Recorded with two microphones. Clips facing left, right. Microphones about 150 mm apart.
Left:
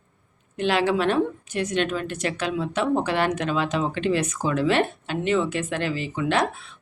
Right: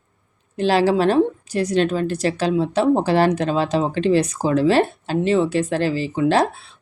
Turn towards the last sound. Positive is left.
turn(degrees=-35)  # may be behind; listen again after turning